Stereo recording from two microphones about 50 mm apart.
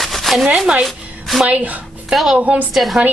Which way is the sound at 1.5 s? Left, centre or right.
Right.